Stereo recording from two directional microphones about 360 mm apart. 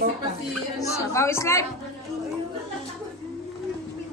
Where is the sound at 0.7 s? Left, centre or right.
Centre.